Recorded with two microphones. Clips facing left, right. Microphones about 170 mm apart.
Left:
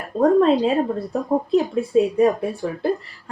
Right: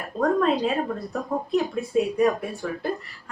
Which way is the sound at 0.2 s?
30° left (ahead or behind).